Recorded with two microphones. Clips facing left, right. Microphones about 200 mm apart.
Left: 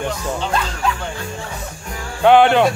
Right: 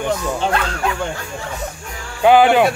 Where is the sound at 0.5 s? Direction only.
60° right (ahead or behind).